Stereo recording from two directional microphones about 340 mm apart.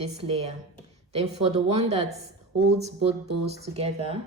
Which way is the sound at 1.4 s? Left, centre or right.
Centre.